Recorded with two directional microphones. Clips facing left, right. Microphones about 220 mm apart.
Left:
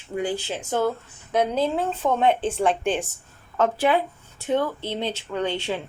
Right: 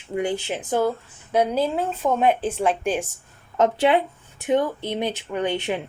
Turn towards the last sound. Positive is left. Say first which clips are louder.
# right 2 dB
turn(degrees=-20)  # may be behind; listen again after turning